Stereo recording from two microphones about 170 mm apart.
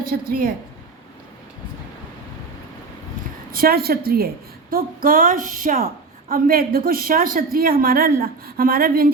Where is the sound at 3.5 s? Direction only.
60° right (ahead or behind).